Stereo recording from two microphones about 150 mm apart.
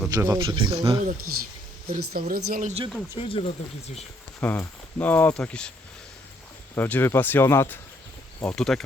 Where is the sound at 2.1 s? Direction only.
80° right.